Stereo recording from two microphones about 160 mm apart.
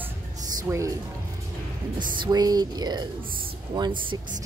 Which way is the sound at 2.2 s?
25° right (ahead or behind).